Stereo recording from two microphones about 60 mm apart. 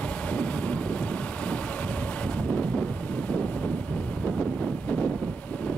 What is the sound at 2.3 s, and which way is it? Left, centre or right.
Wind noise, centre.